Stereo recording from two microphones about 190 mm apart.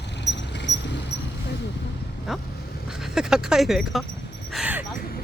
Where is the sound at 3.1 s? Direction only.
5° right (ahead or behind).